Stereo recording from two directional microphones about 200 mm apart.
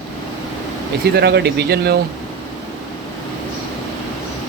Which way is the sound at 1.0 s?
55° right (ahead or behind).